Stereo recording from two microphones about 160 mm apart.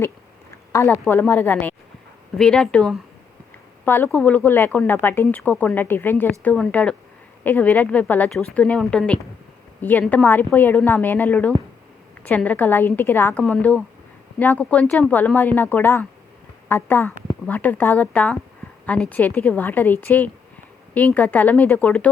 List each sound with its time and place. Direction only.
0.7 s speech: 20° left (ahead or behind)